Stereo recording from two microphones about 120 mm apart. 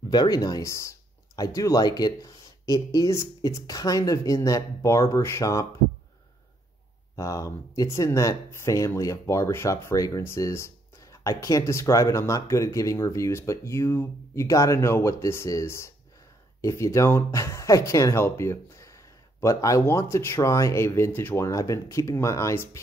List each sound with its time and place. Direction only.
0.1 s speech: 35° left (ahead or behind)
7.2 s speech: 25° left (ahead or behind)
21.5 s speech: 25° left (ahead or behind)